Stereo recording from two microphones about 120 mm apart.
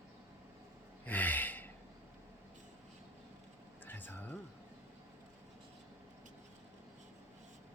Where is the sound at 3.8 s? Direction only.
15° left (ahead or behind).